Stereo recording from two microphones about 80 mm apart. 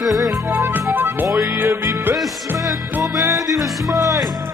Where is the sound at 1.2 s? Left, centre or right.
Right.